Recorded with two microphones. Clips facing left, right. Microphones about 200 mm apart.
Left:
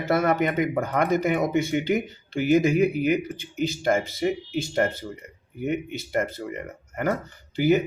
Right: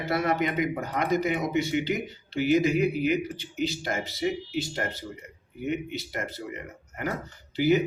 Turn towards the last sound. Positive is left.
turn(degrees=50)  # may be behind; listen again after turning